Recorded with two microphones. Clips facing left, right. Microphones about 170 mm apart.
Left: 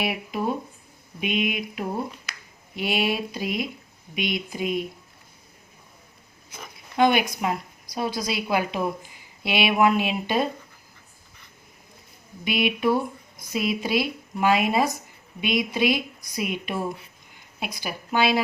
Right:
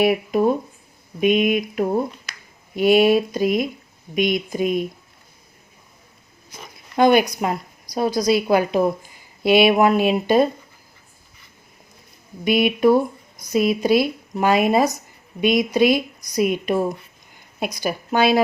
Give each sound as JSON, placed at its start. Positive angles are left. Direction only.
{"t": 0.0, "sound": "a woman's voice", "side_deg": -45}
{"t": 6.9, "sound": "a woman's voice", "side_deg": -40}
{"t": 12.5, "sound": "a woman's voice", "side_deg": -45}